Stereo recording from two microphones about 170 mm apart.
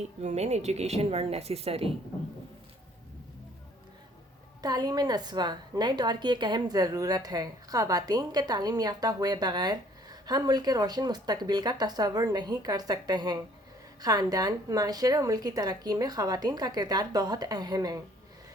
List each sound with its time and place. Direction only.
0.2 s speech: 40° right (ahead or behind)
4.6 s a woman's voice: 25° right (ahead or behind)